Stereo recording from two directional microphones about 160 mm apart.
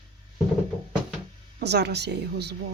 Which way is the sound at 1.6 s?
90° right.